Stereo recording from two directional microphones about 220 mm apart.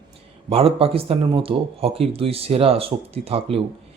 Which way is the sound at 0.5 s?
25° right (ahead or behind).